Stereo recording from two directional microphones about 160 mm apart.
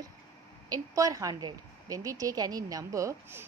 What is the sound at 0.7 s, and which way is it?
A woman's voice, 20° right (ahead or behind).